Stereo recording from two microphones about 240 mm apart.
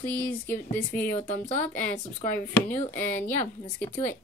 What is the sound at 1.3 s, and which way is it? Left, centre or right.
Speech, left.